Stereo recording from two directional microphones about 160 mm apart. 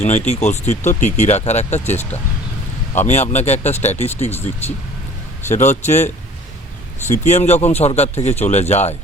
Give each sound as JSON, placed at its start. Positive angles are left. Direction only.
{"t": 0.0, "sound": "speech", "side_deg": 45}
{"t": 5.5, "sound": "speech", "side_deg": 45}